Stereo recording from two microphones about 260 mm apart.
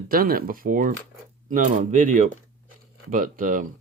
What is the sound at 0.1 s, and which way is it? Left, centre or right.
Speech, right.